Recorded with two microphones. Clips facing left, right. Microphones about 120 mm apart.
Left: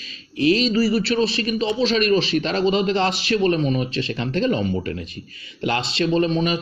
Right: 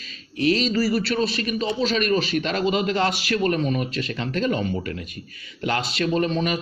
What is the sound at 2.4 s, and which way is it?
Speech, 30° left (ahead or behind).